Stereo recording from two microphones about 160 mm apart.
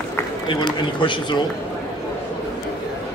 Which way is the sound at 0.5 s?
30° left (ahead or behind).